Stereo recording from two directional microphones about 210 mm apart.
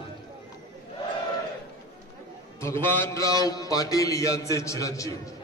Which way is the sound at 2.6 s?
10° left (ahead or behind).